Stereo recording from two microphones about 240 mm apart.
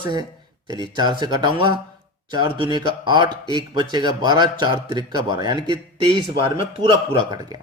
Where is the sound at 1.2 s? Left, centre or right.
Centre.